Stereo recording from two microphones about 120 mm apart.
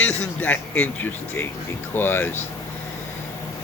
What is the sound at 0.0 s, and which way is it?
Speech, 15° left (ahead or behind).